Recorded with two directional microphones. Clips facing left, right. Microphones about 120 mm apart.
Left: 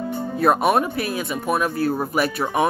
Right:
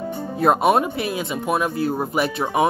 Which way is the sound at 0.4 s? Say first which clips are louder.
Right 1 dB; 25° right (ahead or behind).